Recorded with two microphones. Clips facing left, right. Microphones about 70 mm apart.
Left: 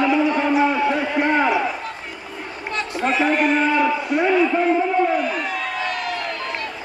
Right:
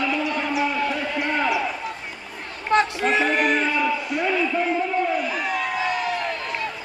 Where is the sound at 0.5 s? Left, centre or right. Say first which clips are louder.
Left 5 dB; left.